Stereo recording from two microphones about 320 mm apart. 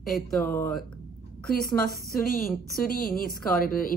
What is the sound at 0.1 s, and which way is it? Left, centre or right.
Speech, centre.